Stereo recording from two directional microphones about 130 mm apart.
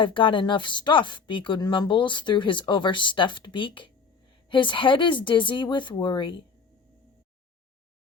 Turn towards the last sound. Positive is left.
turn(degrees=35)  # may be behind; listen again after turning